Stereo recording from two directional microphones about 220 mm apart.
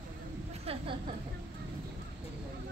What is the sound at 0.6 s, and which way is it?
Speech, 25° right (ahead or behind).